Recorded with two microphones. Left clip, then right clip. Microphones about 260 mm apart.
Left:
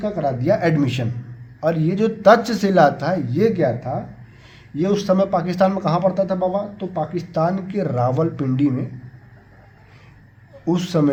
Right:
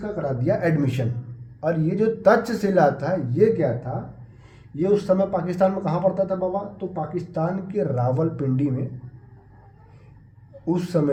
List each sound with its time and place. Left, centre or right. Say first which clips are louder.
0.2 s speech: left 4 dB; left
4.8 s speech: left 2 dB; left
10.7 s speech: left 3 dB; left